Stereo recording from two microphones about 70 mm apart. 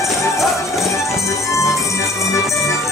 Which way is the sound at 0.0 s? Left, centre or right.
Centre.